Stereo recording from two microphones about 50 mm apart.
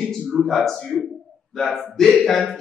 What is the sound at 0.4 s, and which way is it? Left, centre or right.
Speech, centre.